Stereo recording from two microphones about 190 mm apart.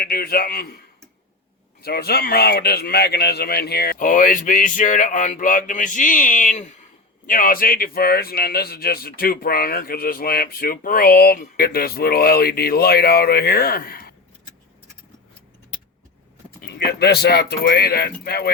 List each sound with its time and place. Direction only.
0.0 s speech: 50° left (ahead or behind)
7.3 s speech: 50° left (ahead or behind)
16.6 s speech: 60° left (ahead or behind)